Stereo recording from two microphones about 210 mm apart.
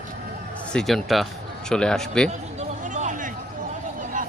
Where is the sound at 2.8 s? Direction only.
35° right (ahead or behind).